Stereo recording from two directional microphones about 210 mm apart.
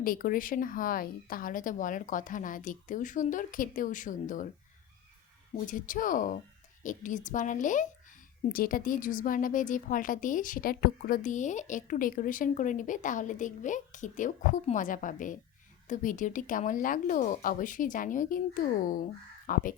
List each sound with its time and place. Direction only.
0.0 s a woman's voice: 40° left (ahead or behind)
5.5 s a woman's voice: 40° left (ahead or behind)